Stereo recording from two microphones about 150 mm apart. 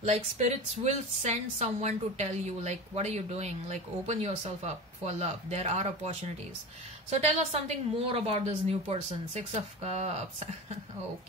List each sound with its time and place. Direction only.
0.0 s a woman's voice: 50° right (ahead or behind)